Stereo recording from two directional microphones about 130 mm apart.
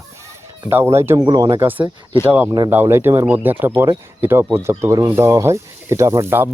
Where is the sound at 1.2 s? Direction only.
30° right (ahead or behind).